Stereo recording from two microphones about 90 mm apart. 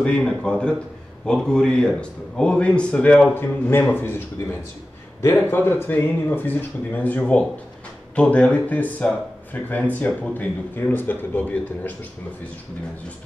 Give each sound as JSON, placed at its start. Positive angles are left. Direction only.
{"t": 0.0, "sound": "speech", "side_deg": 10}